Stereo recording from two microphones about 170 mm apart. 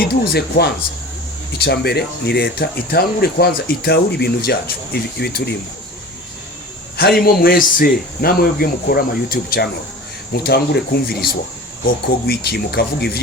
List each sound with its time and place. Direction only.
0.3 s speech: 70° left (ahead or behind)
7.0 s speech: 60° left (ahead or behind)
10.3 s speech: 70° left (ahead or behind)